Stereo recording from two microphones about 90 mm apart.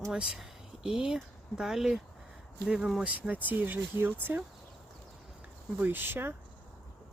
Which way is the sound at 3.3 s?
20° right (ahead or behind).